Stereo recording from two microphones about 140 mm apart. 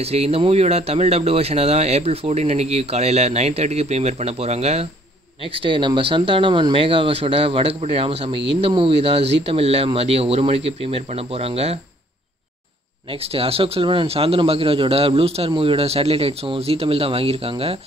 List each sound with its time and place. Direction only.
0.0 s speech: 45° right (ahead or behind)
5.5 s speech: 40° right (ahead or behind)
13.1 s speech: 45° right (ahead or behind)